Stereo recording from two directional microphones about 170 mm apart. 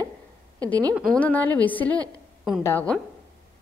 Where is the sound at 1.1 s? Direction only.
10° left (ahead or behind).